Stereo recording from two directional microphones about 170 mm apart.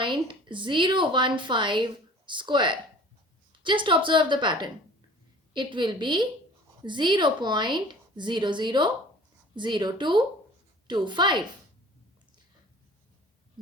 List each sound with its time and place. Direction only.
0.0 s a woman's voice: 30° right (ahead or behind)